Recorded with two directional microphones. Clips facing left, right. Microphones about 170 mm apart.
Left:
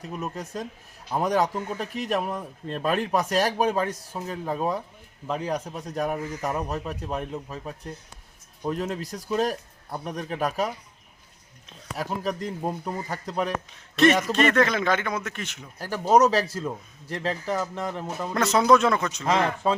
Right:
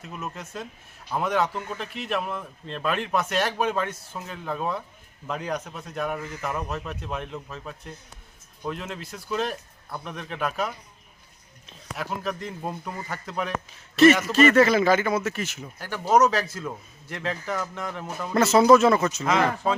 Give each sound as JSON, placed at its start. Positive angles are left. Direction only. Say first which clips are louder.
{"t": 0.0, "sound": "speech", "louder": "left 3 dB", "side_deg": 35}
{"t": 8.6, "sound": "speech", "louder": "left 4 dB", "side_deg": 40}
{"t": 11.9, "sound": "speech", "louder": "left 2 dB", "side_deg": 35}
{"t": 13.9, "sound": "a man's voice", "louder": "right 3 dB", "side_deg": -5}
{"t": 15.8, "sound": "speech", "louder": "left 1 dB", "side_deg": 35}
{"t": 18.3, "sound": "speech", "louder": "right 3 dB", "side_deg": -5}
{"t": 19.2, "sound": "speech", "louder": "even", "side_deg": 35}